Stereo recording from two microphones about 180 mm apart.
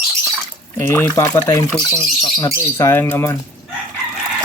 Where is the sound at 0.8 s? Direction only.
10° left (ahead or behind).